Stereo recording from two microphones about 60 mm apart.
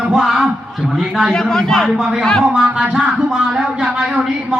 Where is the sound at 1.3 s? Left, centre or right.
Centre.